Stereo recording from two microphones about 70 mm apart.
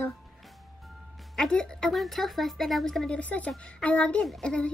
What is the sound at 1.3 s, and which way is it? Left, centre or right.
A woman's voice, centre.